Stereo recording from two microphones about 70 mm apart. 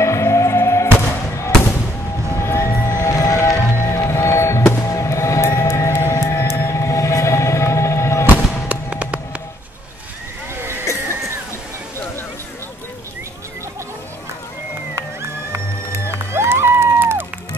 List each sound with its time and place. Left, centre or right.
0.0 s music: left
2.3 s music: left
2.9 s music: left
8.6 s music: centre
16.1 s music: right